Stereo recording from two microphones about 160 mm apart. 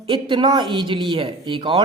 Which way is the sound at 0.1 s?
30° right (ahead or behind).